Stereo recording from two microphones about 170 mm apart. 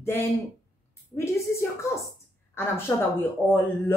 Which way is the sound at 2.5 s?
15° left (ahead or behind).